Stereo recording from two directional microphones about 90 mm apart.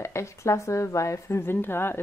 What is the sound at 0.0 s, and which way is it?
A woman's voice, 30° left (ahead or behind).